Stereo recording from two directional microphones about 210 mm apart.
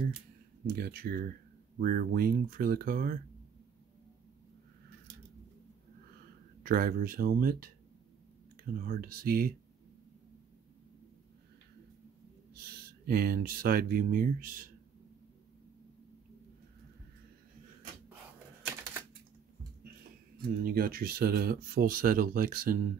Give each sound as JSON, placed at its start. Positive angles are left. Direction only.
{"t": 0.7, "sound": "speech", "side_deg": -45}
{"t": 6.6, "sound": "speech", "side_deg": -45}
{"t": 8.7, "sound": "speech", "side_deg": -45}
{"t": 13.0, "sound": "speech", "side_deg": -45}
{"t": 20.6, "sound": "speech", "side_deg": -45}